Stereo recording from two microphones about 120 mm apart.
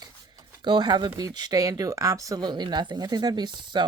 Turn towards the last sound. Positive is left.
turn(degrees=-40)  # may be behind; listen again after turning